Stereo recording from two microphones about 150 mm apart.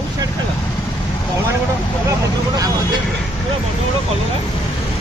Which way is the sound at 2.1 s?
25° right (ahead or behind).